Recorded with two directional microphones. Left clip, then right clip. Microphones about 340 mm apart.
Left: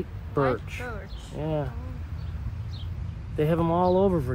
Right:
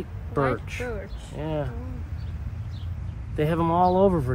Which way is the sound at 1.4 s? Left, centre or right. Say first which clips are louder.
Even; right.